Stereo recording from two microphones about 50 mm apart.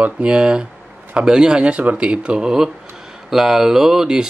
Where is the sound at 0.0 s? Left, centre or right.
Right.